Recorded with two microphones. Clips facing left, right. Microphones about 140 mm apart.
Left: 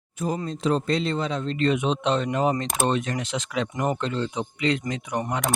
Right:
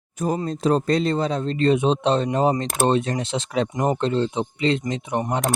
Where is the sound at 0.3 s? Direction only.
40° right (ahead or behind).